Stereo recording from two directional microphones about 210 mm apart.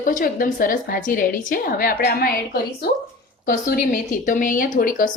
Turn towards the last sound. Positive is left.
turn(degrees=40)  # may be behind; listen again after turning